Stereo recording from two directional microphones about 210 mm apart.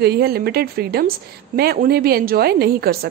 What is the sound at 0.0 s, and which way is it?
A woman's voice, 50° right (ahead or behind).